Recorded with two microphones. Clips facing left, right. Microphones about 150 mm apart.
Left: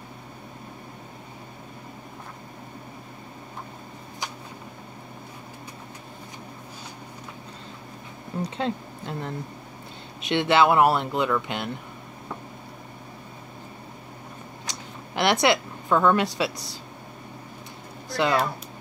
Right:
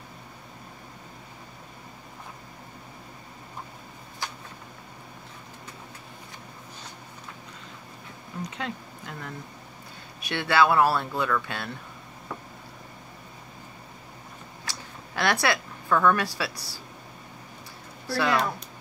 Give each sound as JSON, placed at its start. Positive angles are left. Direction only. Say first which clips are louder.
{"t": 8.4, "sound": "speech", "louder": "left 6 dB", "side_deg": 30}
{"t": 14.7, "sound": "speech", "louder": "left 1 dB", "side_deg": 20}
{"t": 18.0, "sound": "speech", "louder": "left 2 dB", "side_deg": 20}